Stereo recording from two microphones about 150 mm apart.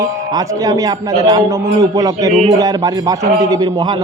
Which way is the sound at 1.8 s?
25° right (ahead or behind).